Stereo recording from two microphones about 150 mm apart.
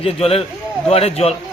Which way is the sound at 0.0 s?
40° left (ahead or behind).